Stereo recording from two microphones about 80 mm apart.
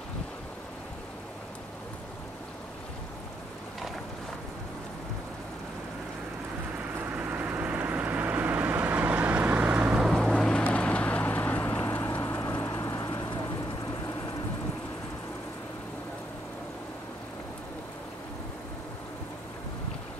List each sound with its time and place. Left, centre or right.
7.1 s vehicle: centre
10.0 s vehicle: centre; by 13.0 s left